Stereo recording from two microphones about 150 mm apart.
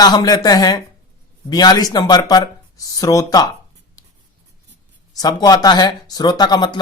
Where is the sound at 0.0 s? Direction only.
25° left (ahead or behind).